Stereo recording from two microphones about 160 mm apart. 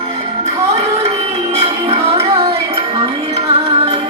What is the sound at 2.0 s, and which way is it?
Music, 35° right (ahead or behind).